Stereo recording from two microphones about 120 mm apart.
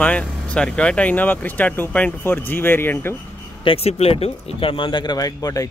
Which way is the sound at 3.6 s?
55° left (ahead or behind).